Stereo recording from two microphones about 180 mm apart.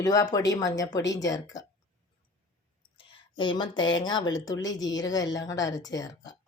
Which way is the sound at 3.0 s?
25° left (ahead or behind).